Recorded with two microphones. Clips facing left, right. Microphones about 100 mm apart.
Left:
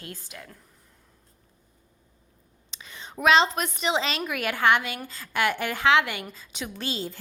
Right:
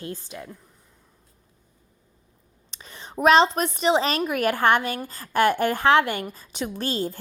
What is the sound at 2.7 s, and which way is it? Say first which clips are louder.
A woman's voice: right 5 dB; 35° right (ahead or behind).